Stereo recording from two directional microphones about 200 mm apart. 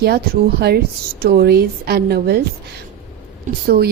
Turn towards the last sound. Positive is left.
turn(degrees=-40)  # may be behind; listen again after turning